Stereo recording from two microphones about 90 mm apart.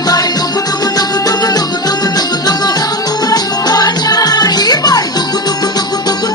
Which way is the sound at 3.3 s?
45° left (ahead or behind).